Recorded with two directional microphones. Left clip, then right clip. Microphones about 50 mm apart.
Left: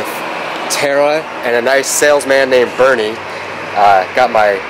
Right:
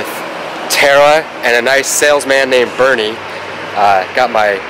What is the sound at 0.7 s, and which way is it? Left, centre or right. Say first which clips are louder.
Speech: right 5 dB; right.